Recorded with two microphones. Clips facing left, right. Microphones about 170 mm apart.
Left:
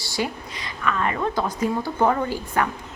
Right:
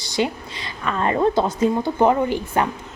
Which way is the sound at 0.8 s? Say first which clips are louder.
Right 5 dB; 30° right (ahead or behind).